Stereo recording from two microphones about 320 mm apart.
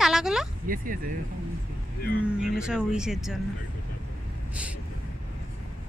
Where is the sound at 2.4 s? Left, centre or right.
Centre.